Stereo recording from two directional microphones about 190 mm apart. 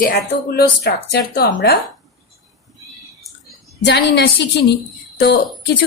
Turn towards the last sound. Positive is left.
turn(degrees=60)  # may be behind; listen again after turning